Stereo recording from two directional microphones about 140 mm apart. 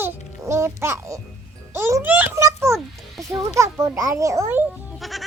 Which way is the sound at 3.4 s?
20° right (ahead or behind).